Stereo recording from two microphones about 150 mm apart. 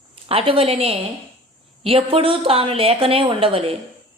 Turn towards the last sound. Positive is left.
turn(degrees=-40)  # may be behind; listen again after turning